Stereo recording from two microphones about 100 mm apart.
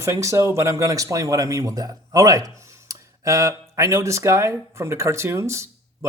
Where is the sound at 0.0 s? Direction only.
30° right (ahead or behind).